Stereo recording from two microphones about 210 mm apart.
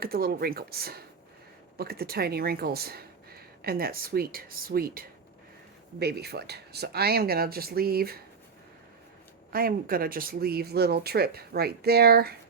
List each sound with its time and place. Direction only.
0.0 s a woman's voice: 45° right (ahead or behind)
9.5 s a woman's voice: 45° right (ahead or behind)